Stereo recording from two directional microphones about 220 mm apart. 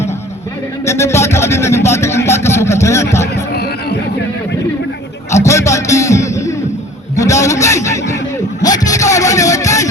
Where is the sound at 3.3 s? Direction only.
50° left (ahead or behind).